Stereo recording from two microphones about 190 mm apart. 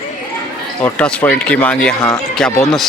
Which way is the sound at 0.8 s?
5° left (ahead or behind).